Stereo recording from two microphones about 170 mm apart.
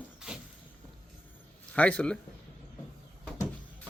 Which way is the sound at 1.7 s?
10° left (ahead or behind).